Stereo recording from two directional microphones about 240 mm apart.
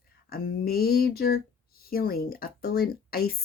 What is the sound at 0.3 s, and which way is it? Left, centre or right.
Speech, left.